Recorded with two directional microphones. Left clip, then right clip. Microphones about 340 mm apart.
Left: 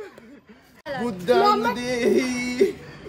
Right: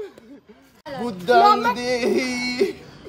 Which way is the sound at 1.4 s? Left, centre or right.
Centre.